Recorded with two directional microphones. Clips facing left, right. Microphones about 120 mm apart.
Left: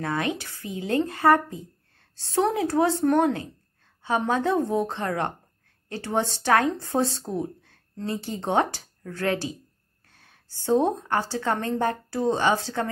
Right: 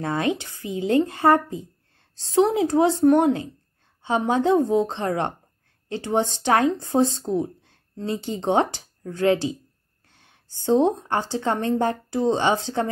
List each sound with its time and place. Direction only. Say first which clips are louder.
0.0 s a woman's voice: right 3 dB; 25° right (ahead or behind)